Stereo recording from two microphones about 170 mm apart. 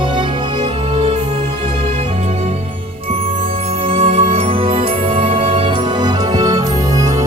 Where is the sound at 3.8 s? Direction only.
30° right (ahead or behind).